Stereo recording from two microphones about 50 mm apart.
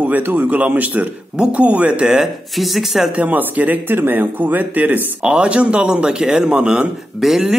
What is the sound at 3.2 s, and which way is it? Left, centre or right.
Speech, right.